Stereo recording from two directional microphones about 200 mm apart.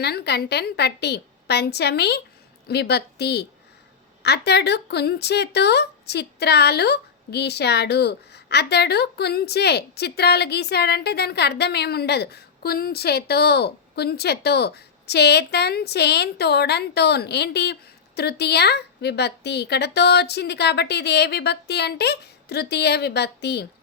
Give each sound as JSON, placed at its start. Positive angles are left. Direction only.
{"t": 0.0, "sound": "a woman's voice", "side_deg": 55}